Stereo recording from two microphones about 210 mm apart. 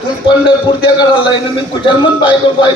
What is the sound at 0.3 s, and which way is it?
Speech, 25° left (ahead or behind).